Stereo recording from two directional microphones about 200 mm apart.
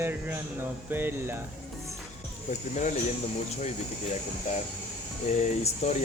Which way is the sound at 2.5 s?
35° left (ahead or behind).